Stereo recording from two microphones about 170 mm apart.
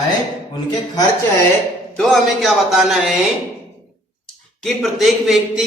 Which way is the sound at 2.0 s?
Centre (ahead or behind).